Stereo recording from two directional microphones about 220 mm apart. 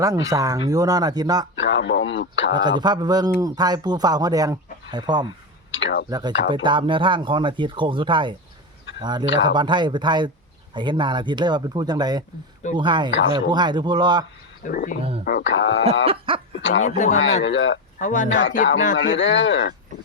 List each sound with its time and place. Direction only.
0.0 s speech: 15° right (ahead or behind)
1.5 s a man's voice: 55° left (ahead or behind)
2.5 s speech: 20° right (ahead or behind)
5.7 s speech: 55° left (ahead or behind)
6.1 s speech: 20° right (ahead or behind)
14.6 s frog: 40° left (ahead or behind)
15.2 s a man's voice: 45° left (ahead or behind)
16.0 s speech: 25° right (ahead or behind)
16.8 s frog: 35° left (ahead or behind)
17.4 s a man's voice: 55° left (ahead or behind)
18.0 s frog: 35° left (ahead or behind)
18.3 s a man's voice: 55° left (ahead or behind)